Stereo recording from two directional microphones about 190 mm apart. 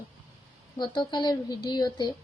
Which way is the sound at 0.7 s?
25° left (ahead or behind).